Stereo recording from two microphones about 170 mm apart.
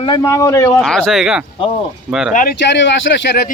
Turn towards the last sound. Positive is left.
turn(degrees=90)